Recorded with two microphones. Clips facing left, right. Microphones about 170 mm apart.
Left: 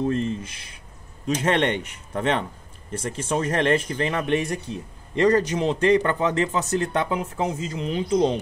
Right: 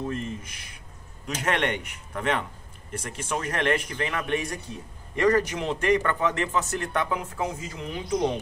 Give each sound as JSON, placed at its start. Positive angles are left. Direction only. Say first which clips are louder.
{"t": 0.0, "sound": "a man's voice", "louder": "left 7 dB", "side_deg": 30}